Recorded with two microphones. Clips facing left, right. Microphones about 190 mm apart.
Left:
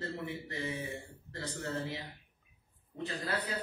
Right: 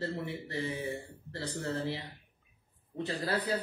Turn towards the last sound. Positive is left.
turn(degrees=-30)  # may be behind; listen again after turning